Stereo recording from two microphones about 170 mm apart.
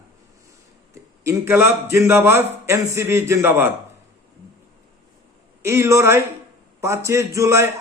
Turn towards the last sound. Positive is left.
turn(degrees=-15)  # may be behind; listen again after turning